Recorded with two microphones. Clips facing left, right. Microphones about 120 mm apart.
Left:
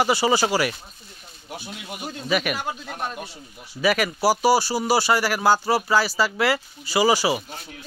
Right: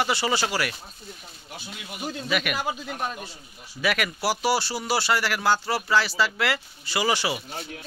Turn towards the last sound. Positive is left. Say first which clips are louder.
# left 6 dB
turn(degrees=10)  # may be behind; listen again after turning